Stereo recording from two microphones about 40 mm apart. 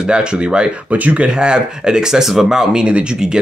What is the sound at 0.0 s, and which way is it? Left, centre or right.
Speech, right.